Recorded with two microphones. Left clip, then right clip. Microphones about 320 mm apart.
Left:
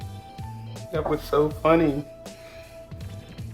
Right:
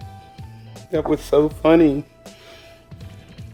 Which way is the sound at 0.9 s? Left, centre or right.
Right.